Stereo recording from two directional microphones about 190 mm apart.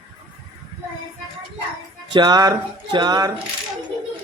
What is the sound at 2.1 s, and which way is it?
Music, 20° right (ahead or behind).